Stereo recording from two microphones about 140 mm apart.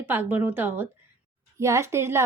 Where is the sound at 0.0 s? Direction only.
15° right (ahead or behind).